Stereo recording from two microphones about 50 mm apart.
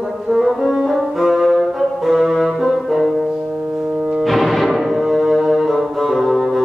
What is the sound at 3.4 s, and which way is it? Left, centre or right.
Music, centre.